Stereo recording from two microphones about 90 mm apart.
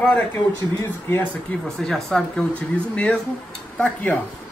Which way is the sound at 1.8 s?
5° left (ahead or behind).